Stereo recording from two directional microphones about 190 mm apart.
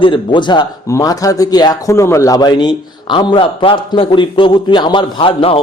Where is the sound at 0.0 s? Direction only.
25° left (ahead or behind).